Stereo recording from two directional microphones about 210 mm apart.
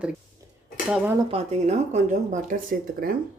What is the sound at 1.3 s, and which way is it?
Speech, 30° right (ahead or behind).